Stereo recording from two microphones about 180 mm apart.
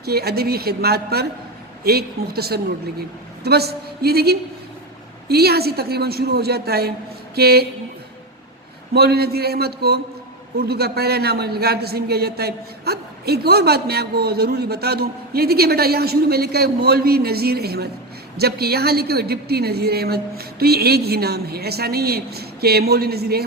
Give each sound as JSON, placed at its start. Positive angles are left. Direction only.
{"t": 0.0, "sound": "a man's voice", "side_deg": -60}
{"t": 8.9, "sound": "a man's voice", "side_deg": -60}